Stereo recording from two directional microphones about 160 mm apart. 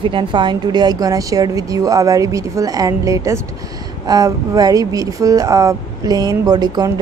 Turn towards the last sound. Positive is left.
turn(degrees=-25)  # may be behind; listen again after turning